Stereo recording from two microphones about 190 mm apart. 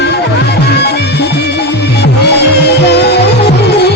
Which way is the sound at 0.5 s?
60° left (ahead or behind).